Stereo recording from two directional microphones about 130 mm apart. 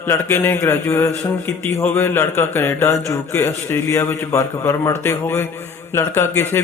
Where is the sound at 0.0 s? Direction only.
15° left (ahead or behind).